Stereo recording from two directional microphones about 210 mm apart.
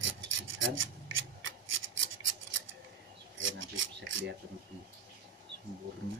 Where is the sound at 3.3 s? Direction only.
65° right (ahead or behind).